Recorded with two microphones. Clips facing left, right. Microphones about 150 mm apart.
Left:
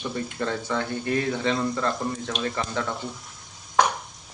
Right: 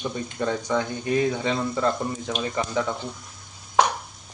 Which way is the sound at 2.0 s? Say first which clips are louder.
Even; 5° right (ahead or behind).